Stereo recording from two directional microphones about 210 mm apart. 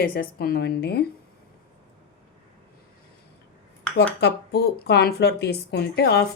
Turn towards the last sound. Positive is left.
turn(degrees=50)  # may be behind; listen again after turning